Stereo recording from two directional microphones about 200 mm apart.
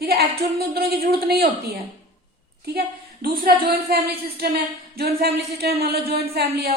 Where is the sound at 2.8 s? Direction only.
50° right (ahead or behind).